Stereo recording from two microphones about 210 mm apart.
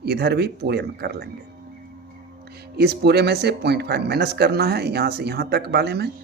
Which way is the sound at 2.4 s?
50° right (ahead or behind).